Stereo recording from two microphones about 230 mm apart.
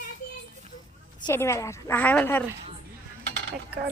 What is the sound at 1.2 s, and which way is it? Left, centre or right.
A woman's voice, centre.